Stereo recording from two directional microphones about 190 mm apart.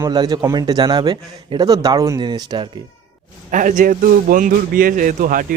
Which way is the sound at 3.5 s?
45° right (ahead or behind).